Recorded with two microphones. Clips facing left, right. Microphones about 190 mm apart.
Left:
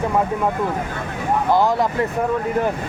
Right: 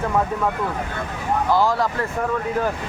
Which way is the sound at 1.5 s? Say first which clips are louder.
Left 2 dB; 20° left (ahead or behind).